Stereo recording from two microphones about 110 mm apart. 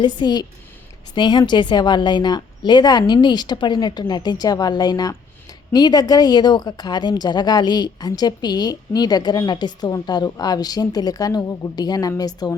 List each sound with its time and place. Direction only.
0.0 s a woman's voice: 40° left (ahead or behind)